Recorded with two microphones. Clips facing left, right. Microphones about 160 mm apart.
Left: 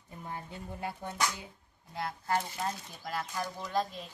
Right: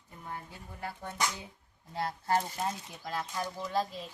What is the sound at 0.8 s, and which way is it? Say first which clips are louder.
Speech: left 1 dB; 20° left (ahead or behind).